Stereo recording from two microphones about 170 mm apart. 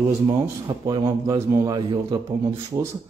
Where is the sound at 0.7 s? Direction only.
25° right (ahead or behind).